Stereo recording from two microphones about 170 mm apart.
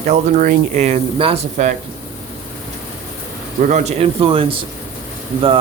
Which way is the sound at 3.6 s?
45° right (ahead or behind).